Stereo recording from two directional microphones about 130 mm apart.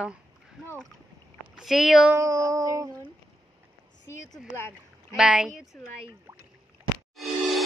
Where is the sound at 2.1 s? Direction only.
25° right (ahead or behind).